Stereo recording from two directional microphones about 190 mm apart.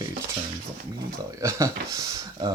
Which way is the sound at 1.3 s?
15° right (ahead or behind).